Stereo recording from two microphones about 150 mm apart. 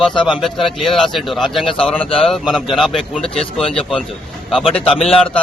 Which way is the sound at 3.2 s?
40° left (ahead or behind).